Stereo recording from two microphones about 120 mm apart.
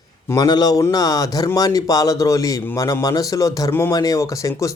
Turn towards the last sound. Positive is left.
turn(degrees=25)  # may be behind; listen again after turning